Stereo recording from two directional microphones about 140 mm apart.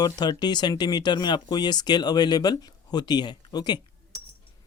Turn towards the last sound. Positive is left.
turn(degrees=30)  # may be behind; listen again after turning